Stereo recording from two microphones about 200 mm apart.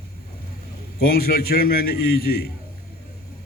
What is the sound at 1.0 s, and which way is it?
A man's voice, 50° left (ahead or behind).